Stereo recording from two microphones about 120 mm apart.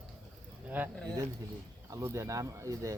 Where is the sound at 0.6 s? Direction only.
15° right (ahead or behind).